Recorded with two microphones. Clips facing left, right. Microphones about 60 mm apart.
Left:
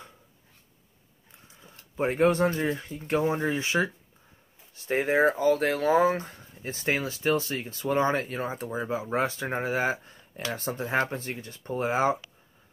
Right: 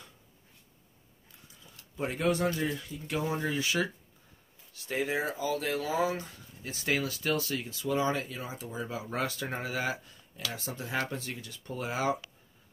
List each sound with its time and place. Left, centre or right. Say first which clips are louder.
1.5 s speech: left 5 dB; left
10.5 s speech: left 8 dB; left